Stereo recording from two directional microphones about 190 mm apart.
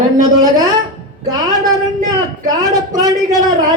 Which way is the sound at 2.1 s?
20° right (ahead or behind).